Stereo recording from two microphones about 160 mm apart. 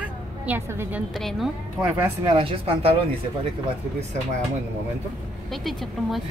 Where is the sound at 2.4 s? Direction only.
40° right (ahead or behind).